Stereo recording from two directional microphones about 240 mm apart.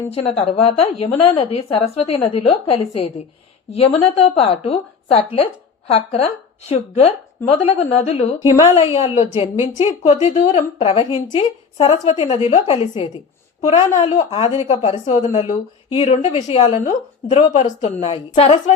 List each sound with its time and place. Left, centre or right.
0.1 s a woman's voice: left